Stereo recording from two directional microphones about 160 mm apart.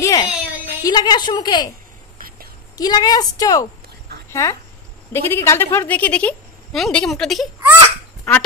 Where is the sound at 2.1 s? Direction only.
65° right (ahead or behind).